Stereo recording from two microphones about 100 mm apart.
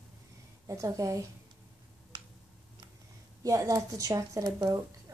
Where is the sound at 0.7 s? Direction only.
35° right (ahead or behind).